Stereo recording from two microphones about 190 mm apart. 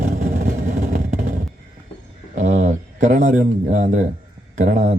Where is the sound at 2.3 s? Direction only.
40° right (ahead or behind).